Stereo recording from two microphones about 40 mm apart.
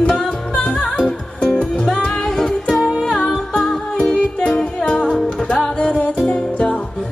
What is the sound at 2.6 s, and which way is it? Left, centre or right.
Music, centre.